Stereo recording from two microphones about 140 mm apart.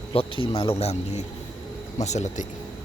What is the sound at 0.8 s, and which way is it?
Speech, 50° left (ahead or behind).